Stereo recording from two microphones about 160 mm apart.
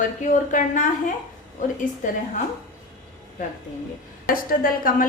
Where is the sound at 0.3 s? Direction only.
50° left (ahead or behind).